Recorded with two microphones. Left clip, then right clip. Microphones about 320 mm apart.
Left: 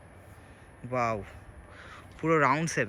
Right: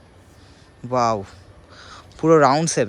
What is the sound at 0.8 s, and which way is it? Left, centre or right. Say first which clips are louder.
Speech: right 10 dB; centre.